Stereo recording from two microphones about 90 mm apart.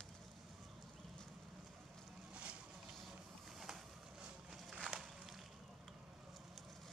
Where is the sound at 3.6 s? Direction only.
5° right (ahead or behind).